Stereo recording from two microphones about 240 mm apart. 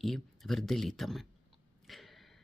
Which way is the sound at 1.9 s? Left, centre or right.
Centre.